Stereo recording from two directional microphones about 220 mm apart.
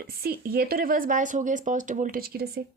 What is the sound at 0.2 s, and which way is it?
Speech, 45° right (ahead or behind).